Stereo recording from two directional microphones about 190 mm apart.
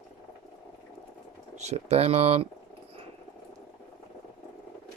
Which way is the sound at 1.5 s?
35° right (ahead or behind).